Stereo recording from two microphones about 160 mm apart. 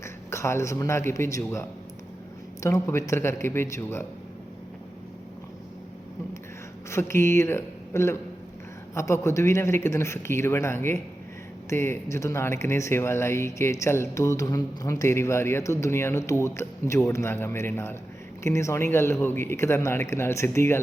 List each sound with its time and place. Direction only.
0.0 s a man's voice: 15° left (ahead or behind)
2.6 s speech: 15° left (ahead or behind)
6.9 s speech: 15° left (ahead or behind)